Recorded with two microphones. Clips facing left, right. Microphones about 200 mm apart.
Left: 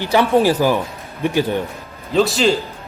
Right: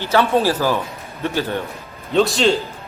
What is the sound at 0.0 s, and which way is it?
Speech, 15° left (ahead or behind).